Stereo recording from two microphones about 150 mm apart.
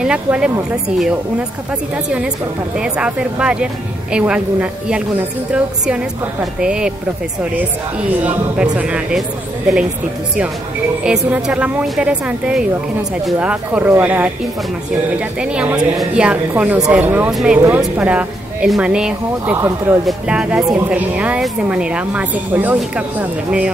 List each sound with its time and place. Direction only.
0.0 s speech: 5° right (ahead or behind)
2.8 s speech: 5° right (ahead or behind)
6.6 s speech: 5° right (ahead or behind)
8.1 s speech: 10° right (ahead or behind)
11.1 s speech: 5° right (ahead or behind)
17.6 s speech: 10° right (ahead or behind)
19.5 s speech: 15° right (ahead or behind)
20.1 s speech: 5° right (ahead or behind)